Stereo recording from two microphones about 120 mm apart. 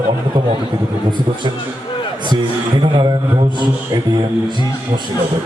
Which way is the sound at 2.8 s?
40° right (ahead or behind).